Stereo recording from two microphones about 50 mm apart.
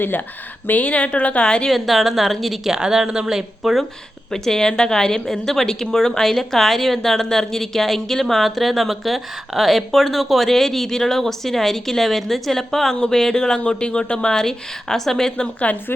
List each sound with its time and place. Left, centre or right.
0.0 s speech: left; by 1.7 s centre
1.7 s speech: centre
2.7 s speech: centre
3.6 s speech: centre
4.3 s a woman's voice: centre
15.7 s speech: left